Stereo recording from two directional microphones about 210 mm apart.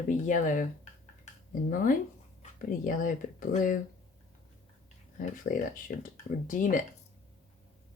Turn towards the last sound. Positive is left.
turn(degrees=40)  # may be behind; listen again after turning